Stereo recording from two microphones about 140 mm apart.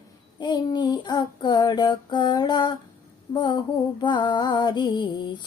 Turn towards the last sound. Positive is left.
turn(degrees=30)  # may be behind; listen again after turning